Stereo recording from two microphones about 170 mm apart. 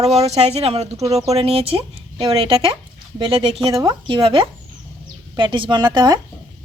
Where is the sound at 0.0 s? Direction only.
40° right (ahead or behind).